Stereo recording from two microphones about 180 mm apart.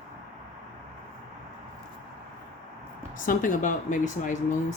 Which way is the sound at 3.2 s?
45° left (ahead or behind).